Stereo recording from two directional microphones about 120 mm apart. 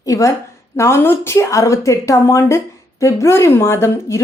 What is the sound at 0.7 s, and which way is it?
A woman's voice, 25° left (ahead or behind).